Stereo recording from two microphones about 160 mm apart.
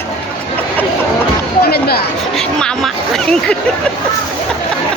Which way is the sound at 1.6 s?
80° left.